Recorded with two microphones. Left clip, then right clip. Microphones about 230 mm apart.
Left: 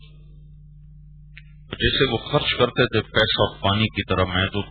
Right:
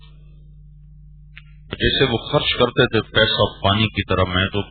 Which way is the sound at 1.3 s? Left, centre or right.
Centre.